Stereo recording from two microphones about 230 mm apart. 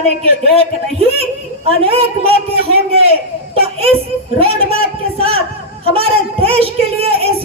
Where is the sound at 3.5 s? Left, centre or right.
Right.